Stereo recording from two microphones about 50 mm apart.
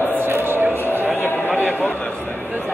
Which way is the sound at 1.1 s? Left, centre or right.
Left.